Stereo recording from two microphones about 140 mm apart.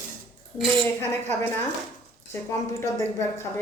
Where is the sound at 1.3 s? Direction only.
15° left (ahead or behind).